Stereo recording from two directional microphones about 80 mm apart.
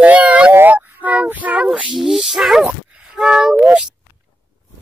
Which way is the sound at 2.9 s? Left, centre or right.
Centre.